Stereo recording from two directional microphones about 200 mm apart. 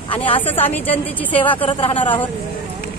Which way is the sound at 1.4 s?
25° left (ahead or behind).